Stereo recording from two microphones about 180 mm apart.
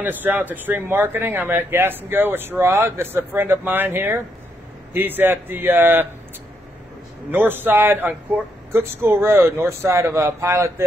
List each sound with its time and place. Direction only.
0.0 s speech: 10° right (ahead or behind)
7.2 s speech: 10° right (ahead or behind)